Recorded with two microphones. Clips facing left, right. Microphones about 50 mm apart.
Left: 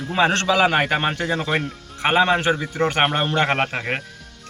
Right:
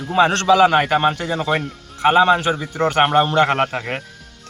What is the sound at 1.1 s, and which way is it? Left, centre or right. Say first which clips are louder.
Speech: right 2 dB; left.